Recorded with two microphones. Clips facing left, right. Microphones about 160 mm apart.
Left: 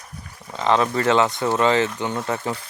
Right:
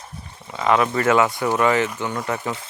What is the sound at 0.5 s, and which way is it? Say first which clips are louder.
Speech: right 1 dB; 30° left (ahead or behind).